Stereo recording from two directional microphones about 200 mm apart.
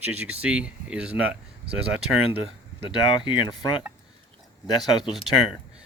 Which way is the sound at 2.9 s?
25° left (ahead or behind).